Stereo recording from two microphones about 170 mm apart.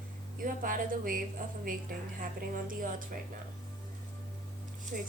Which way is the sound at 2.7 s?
55° right (ahead or behind).